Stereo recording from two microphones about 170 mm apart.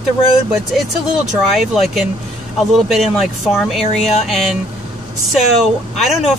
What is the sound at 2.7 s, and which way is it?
Speech, centre (ahead or behind).